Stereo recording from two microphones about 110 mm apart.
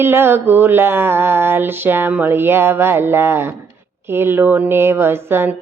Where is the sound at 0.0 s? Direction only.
20° right (ahead or behind).